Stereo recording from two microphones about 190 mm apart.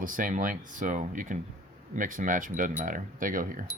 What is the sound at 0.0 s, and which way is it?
Speech, 45° right (ahead or behind).